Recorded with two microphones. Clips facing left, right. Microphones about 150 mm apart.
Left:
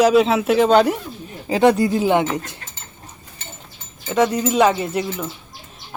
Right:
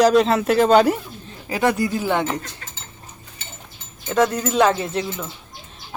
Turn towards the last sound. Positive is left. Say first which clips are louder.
# left 1 dB
turn(degrees=10)  # may be behind; listen again after turning